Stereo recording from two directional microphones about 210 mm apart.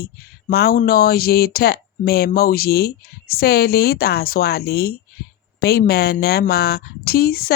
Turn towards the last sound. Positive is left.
turn(degrees=45)  # may be behind; listen again after turning